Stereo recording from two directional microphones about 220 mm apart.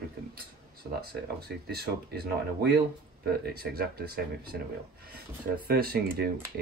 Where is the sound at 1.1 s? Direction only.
45° right (ahead or behind).